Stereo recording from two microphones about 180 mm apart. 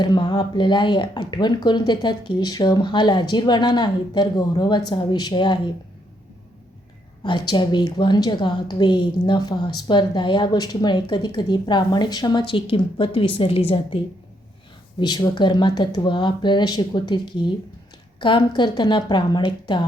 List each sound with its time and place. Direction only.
0.0 s a woman's voice: 25° left (ahead or behind)
7.3 s a woman's voice: 25° left (ahead or behind)